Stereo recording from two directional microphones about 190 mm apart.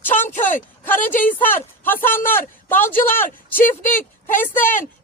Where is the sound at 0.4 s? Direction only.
10° left (ahead or behind).